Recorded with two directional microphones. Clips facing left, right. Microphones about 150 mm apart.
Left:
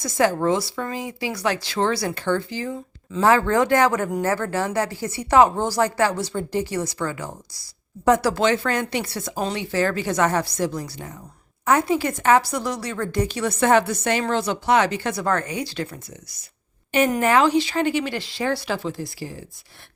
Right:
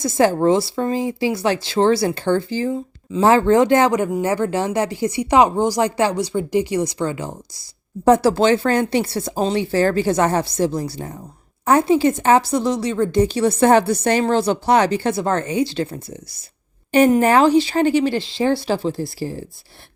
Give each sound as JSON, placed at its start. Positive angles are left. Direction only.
{"t": 0.0, "sound": "a woman's voice", "side_deg": -30}